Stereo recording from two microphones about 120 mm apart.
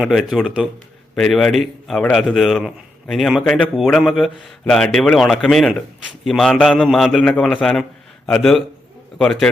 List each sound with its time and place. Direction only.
0.0 s a man's voice: centre (ahead or behind)
1.1 s a man's voice: 5° left (ahead or behind)